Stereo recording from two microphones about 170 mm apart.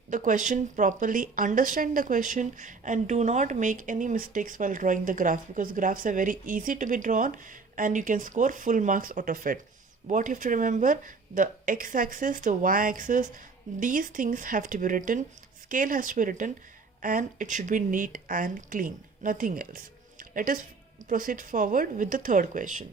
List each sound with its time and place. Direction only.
0.1 s speech: 50° right (ahead or behind)